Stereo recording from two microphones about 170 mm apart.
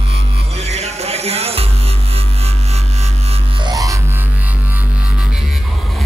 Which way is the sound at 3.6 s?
20° right (ahead or behind).